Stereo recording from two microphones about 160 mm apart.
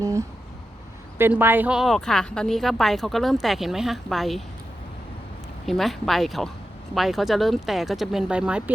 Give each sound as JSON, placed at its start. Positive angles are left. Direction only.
{"t": 0.0, "sound": "a sound", "side_deg": -20}
{"t": 1.2, "sound": "speech", "side_deg": -15}
{"t": 5.6, "sound": "speech", "side_deg": 0}